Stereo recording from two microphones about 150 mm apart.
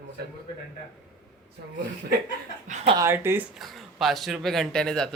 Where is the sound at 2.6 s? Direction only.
50° right (ahead or behind).